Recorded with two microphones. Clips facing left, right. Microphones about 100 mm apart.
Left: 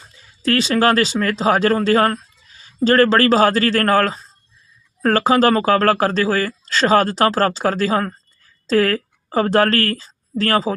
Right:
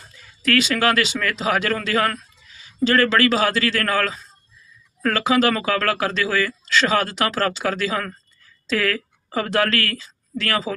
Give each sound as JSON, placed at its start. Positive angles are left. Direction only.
{"t": 0.4, "sound": "a woman's voice", "side_deg": 30}